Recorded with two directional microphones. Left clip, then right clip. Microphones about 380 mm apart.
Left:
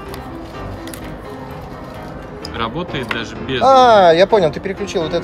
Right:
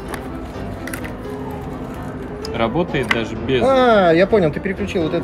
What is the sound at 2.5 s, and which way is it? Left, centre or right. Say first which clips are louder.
Speech: right 3 dB; centre.